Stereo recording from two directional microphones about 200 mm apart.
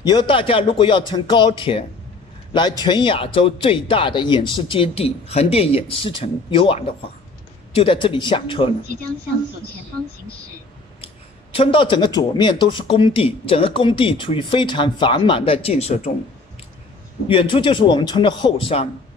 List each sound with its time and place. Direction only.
0.0 s a man's voice: 20° left (ahead or behind)
11.5 s a man's voice: 25° left (ahead or behind)
17.3 s a man's voice: 25° left (ahead or behind)